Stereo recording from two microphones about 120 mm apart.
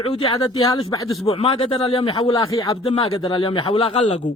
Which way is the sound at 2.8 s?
55° left (ahead or behind).